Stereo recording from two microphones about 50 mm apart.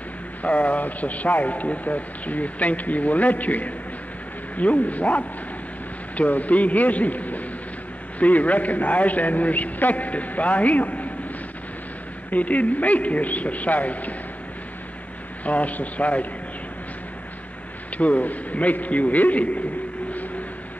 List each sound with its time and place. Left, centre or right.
0.4 s a man's voice: left
12.3 s speech: left
15.4 s a man's voice: left
17.9 s speech: left